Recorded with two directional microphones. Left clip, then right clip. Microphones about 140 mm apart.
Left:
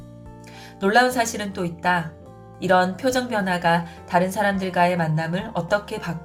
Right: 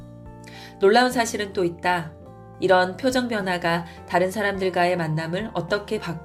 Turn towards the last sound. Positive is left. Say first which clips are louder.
# left 2 dB
turn(degrees=-40)  # may be behind; listen again after turning